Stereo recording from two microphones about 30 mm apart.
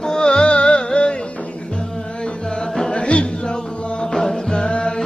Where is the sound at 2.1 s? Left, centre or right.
Left.